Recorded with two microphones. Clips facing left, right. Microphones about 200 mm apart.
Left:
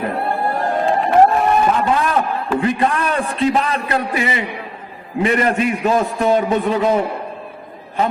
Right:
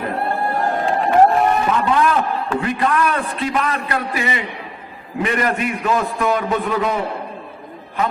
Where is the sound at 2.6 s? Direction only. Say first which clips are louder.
Left 1 dB; 25° left (ahead or behind).